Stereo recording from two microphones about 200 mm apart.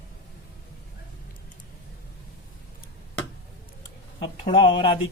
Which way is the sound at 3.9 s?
25° left (ahead or behind).